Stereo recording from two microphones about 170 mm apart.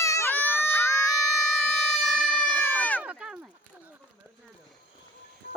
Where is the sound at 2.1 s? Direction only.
5° left (ahead or behind).